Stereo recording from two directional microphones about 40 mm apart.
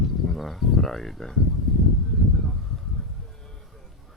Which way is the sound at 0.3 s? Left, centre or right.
Centre.